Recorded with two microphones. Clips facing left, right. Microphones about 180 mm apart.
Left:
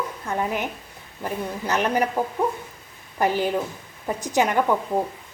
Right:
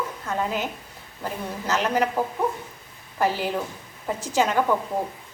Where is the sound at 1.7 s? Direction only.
15° left (ahead or behind).